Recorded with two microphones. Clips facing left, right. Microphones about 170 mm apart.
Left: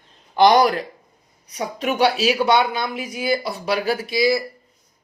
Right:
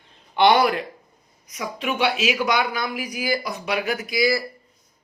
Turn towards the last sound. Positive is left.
turn(degrees=25)  # may be behind; listen again after turning